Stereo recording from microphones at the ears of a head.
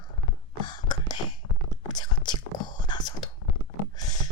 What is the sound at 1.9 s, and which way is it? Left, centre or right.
Whispering, left.